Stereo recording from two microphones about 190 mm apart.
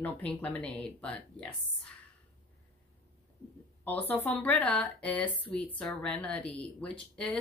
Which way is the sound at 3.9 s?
10° left (ahead or behind).